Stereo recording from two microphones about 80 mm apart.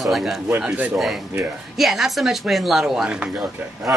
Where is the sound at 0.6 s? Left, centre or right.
Centre.